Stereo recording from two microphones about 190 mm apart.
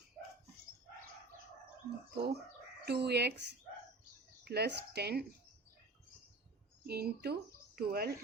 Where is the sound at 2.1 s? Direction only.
60° right (ahead or behind).